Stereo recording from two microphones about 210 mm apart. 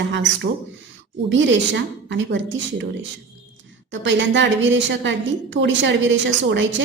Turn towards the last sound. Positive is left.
turn(degrees=-60)  # may be behind; listen again after turning